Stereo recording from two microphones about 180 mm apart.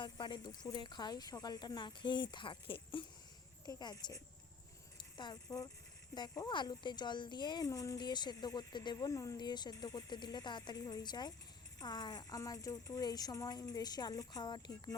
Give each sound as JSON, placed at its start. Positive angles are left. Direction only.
{"t": 0.0, "sound": "speech", "side_deg": 25}